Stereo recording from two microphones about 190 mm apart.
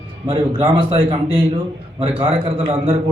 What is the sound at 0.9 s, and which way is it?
Speech, 30° right (ahead or behind).